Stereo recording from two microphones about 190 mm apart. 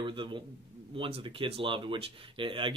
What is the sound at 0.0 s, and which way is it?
Speech, 25° right (ahead or behind).